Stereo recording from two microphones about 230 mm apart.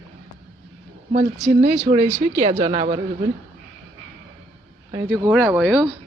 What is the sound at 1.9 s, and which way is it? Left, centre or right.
Speech, right.